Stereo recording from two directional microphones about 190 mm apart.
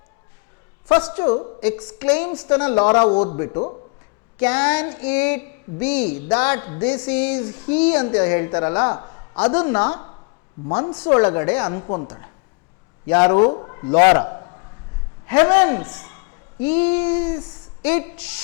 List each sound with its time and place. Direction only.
0.9 s speech: 10° left (ahead or behind)
2.9 s a woman's voice: 30° left (ahead or behind); by 9.0 s 10° left (ahead or behind)
9.0 s a sound: 25° left (ahead or behind)
9.3 s speech: 10° left (ahead or behind)
11.0 s speech: 10° left (ahead or behind)
11.8 s a woman's voice: 30° left (ahead or behind)
13.1 s speech: 10° left (ahead or behind)
13.4 s a man's voice: 25° left (ahead or behind)
14.2 s a sound: 25° left (ahead or behind)
15.4 s a woman's voice: 10° left (ahead or behind)
17.3 s speech: 25° left (ahead or behind)
17.8 s speech: 10° left (ahead or behind)